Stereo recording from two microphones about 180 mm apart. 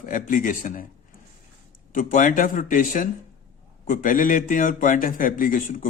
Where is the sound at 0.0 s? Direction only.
50° left (ahead or behind).